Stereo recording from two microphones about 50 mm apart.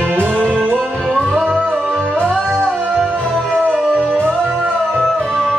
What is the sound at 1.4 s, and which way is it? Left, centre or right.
Music, right.